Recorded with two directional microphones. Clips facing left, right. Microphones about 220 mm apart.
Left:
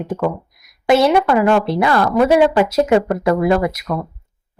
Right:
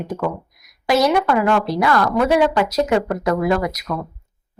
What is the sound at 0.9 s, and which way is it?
A woman's voice, 25° left (ahead or behind).